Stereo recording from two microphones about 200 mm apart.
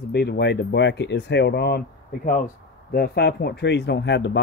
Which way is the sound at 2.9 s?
55° left (ahead or behind).